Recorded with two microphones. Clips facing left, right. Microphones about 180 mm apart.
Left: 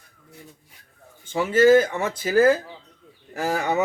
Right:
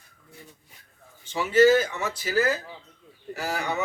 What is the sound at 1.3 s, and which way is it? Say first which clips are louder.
Speech: left 3 dB; 50° left (ahead or behind).